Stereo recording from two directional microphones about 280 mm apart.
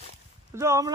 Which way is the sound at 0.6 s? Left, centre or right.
Centre.